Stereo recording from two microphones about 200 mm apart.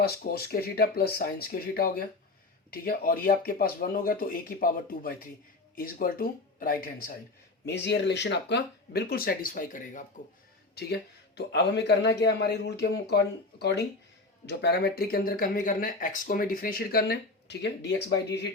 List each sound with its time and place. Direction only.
0.0 s speech: 50° left (ahead or behind)
7.6 s speech: 60° left (ahead or behind); by 10.0 s 40° left (ahead or behind)
10.8 s a man's voice: 55° left (ahead or behind)